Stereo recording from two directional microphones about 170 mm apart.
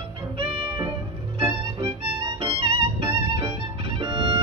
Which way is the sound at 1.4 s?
30° right (ahead or behind).